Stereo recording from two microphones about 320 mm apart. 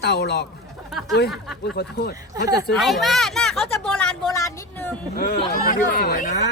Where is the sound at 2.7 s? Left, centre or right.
Centre.